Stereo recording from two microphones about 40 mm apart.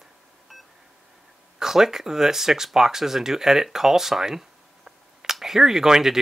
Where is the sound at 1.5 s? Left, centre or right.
Centre.